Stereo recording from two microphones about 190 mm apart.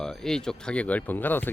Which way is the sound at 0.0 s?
5° left (ahead or behind).